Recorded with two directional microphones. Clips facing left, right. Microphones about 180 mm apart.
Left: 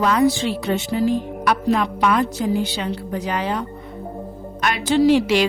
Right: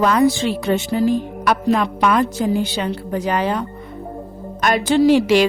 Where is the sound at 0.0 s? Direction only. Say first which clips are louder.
Right 2 dB; 50° right (ahead or behind).